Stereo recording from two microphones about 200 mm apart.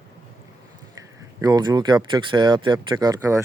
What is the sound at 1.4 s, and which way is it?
Speech, 20° right (ahead or behind).